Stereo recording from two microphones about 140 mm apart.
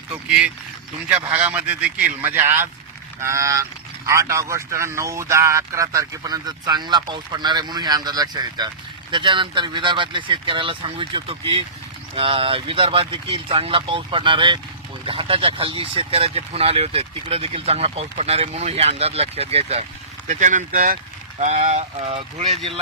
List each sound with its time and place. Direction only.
0.1 s speech: 10° right (ahead or behind); by 19.8 s 45° right (ahead or behind)
20.2 s speech: 60° right (ahead or behind)
22.0 s speech: 45° right (ahead or behind)